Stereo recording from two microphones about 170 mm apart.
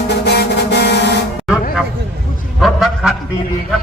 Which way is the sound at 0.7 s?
75° left (ahead or behind).